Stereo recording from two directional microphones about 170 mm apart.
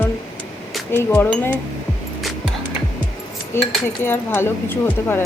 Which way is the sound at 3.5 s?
15° left (ahead or behind).